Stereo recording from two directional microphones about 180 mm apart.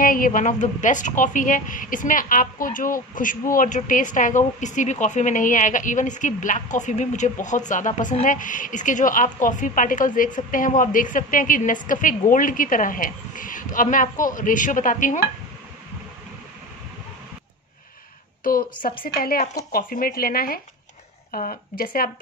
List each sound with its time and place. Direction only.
0.0 s a woman's voice: 50° left (ahead or behind)
18.4 s a woman's voice: 55° left (ahead or behind)